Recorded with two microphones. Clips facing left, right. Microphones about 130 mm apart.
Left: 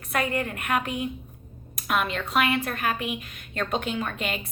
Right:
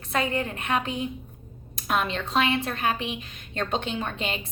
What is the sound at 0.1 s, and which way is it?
A woman's voice, 30° right (ahead or behind).